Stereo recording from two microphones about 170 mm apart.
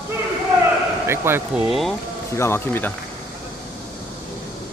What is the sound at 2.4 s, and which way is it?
Speech, 15° left (ahead or behind).